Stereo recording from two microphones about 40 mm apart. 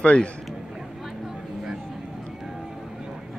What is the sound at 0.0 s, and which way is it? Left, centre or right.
Speech, left.